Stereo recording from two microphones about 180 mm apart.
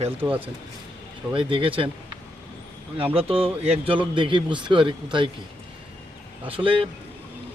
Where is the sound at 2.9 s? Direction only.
30° right (ahead or behind).